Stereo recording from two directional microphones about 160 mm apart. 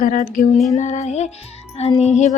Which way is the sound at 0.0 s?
60° left (ahead or behind).